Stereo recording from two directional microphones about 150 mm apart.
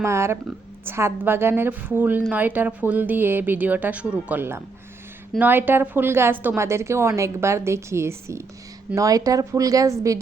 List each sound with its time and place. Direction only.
0.0 s speech: 20° right (ahead or behind)